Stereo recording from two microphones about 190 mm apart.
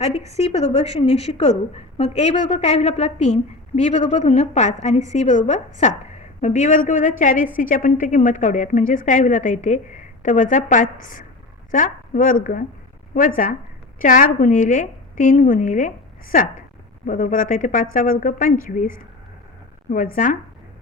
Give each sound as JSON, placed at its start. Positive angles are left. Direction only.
{"t": 0.3, "sound": "a woman's voice", "side_deg": 35}
{"t": 17.1, "sound": "a woman's voice", "side_deg": 45}
{"t": 20.2, "sound": "a woman's voice", "side_deg": 45}